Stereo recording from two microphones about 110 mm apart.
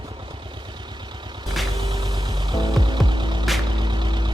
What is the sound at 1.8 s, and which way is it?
Music, 40° right (ahead or behind).